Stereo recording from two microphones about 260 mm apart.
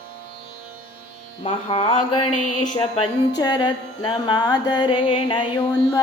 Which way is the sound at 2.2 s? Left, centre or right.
Left.